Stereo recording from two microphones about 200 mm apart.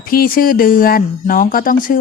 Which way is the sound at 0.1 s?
45° left (ahead or behind).